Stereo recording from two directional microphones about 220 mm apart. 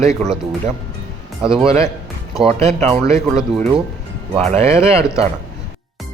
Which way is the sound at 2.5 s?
30° right (ahead or behind).